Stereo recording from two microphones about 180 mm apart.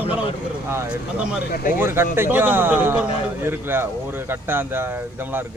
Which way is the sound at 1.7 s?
15° right (ahead or behind).